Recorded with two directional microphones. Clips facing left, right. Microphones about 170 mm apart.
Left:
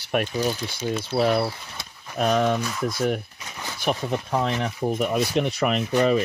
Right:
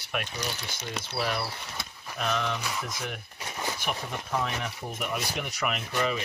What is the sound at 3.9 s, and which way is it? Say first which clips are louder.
Speech: left 13 dB; 35° left (ahead or behind).